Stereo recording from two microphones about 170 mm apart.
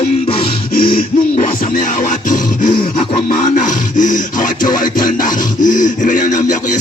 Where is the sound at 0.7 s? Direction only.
60° left (ahead or behind).